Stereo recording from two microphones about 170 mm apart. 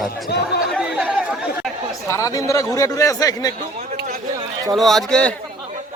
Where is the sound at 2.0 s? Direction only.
15° left (ahead or behind).